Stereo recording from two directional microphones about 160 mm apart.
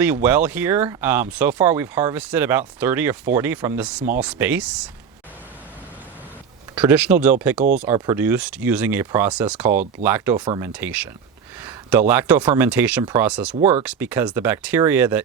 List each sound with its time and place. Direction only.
0.0 s speech: 10° right (ahead or behind)
6.7 s speech: 10° right (ahead or behind)
10.3 s speech: 25° right (ahead or behind)
10.6 s speech: 10° right (ahead or behind)